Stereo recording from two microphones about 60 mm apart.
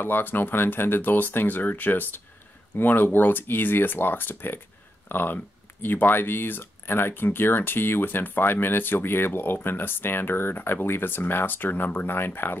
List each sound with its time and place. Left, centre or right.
0.0 s speech: left